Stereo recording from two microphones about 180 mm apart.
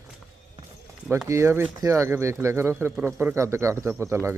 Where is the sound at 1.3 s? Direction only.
15° right (ahead or behind).